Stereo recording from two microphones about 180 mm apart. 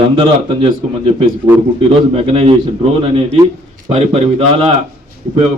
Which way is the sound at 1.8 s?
30° right (ahead or behind).